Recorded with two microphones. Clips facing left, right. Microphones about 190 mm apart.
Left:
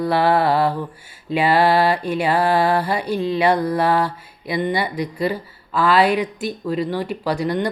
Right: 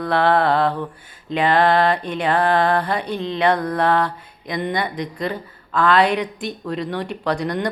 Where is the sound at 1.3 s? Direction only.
5° left (ahead or behind).